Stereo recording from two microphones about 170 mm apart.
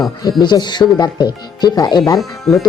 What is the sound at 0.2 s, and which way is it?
Speech, 25° left (ahead or behind).